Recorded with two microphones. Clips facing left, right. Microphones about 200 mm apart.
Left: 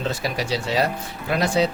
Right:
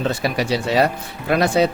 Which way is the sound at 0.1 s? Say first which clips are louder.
Right 4 dB; 60° right (ahead or behind).